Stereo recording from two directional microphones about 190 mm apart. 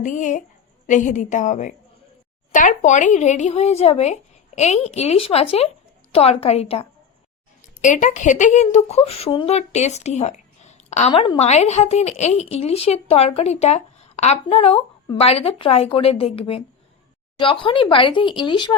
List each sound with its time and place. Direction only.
0.0 s a woman's voice: 40° left (ahead or behind); by 18.7 s 25° left (ahead or behind)